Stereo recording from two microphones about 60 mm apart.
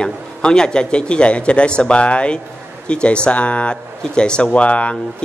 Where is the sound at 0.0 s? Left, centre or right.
Centre.